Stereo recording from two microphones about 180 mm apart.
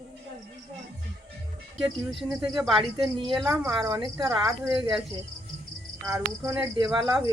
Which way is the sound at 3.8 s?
20° right (ahead or behind).